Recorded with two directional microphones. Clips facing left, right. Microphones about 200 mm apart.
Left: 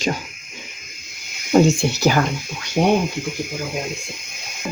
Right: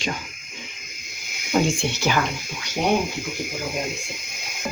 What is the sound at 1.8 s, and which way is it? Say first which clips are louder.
Speech: left 5 dB; 40° left (ahead or behind).